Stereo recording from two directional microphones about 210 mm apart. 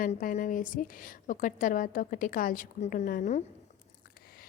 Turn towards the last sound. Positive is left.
turn(degrees=40)  # may be behind; listen again after turning